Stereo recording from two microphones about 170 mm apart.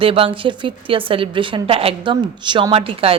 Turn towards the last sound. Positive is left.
turn(degrees=-35)  # may be behind; listen again after turning